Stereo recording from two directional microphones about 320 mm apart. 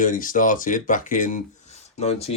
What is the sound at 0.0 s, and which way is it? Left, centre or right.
Speech, left.